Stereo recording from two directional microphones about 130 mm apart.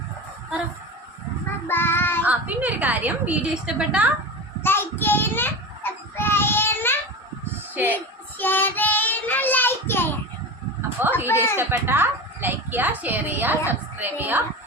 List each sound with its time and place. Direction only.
1.6 s child singing: 15° left (ahead or behind)
2.2 s a woman's voice: 10° right (ahead or behind)
4.6 s a sound: 15° left (ahead or behind)
7.9 s child singing: 15° left (ahead or behind)
11.3 s a woman's voice: 20° left (ahead or behind)
11.5 s a woman's voice: 15° right (ahead or behind)